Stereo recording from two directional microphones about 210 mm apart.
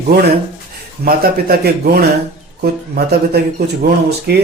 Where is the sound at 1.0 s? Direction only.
45° right (ahead or behind).